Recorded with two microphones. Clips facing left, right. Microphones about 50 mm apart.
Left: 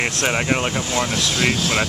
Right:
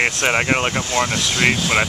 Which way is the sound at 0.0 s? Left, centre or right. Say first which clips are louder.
Right 3 dB; right.